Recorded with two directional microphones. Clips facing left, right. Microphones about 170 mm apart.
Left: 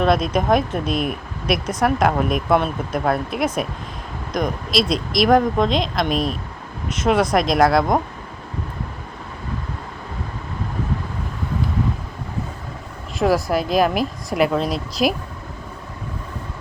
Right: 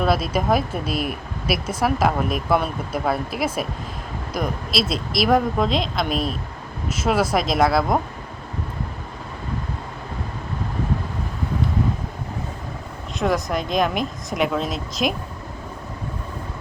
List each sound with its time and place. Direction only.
0.0 s speech: 5° right (ahead or behind)
13.1 s speech: 5° left (ahead or behind)